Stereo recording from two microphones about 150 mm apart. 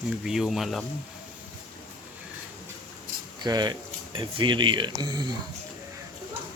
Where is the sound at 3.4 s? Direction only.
25° right (ahead or behind).